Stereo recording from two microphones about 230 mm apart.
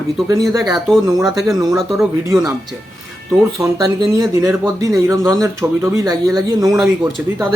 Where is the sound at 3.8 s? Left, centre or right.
Centre.